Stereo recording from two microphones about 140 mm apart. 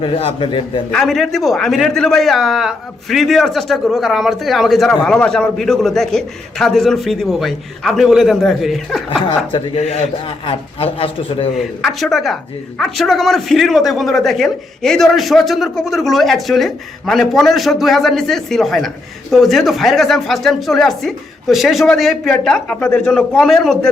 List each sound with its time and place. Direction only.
0.0 s a man's voice: 40° left (ahead or behind)
0.9 s a man's voice: 5° left (ahead or behind)
9.0 s a man's voice: 40° left (ahead or behind)
11.5 s a man's voice: centre (ahead or behind)